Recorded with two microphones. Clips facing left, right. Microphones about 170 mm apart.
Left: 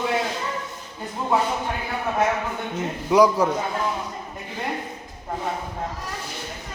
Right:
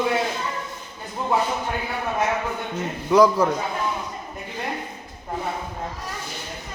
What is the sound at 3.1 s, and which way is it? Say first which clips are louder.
Speech: right 1 dB; 15° left (ahead or behind).